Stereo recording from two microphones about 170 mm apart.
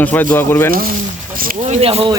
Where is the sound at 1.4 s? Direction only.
50° right (ahead or behind).